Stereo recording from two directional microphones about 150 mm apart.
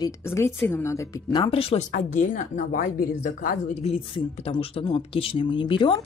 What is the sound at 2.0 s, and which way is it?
Speech, 60° left (ahead or behind).